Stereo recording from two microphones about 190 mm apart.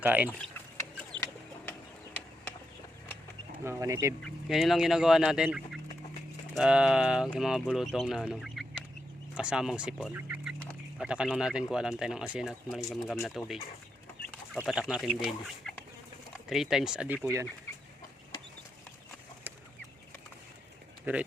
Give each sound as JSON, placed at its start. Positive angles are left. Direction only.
{"t": 0.0, "sound": "speech", "side_deg": -10}
{"t": 0.8, "sound": "mechanisms", "side_deg": 15}
{"t": 3.6, "sound": "speech", "side_deg": -15}
{"t": 4.2, "sound": "fowl", "side_deg": 0}
{"t": 9.3, "sound": "speech", "side_deg": -5}
{"t": 12.9, "sound": "fowl", "side_deg": -5}
{"t": 14.6, "sound": "fowl", "side_deg": -5}
{"t": 21.0, "sound": "speech", "side_deg": -5}